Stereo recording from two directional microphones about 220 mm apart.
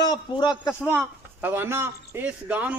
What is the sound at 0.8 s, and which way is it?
Speech, 10° right (ahead or behind).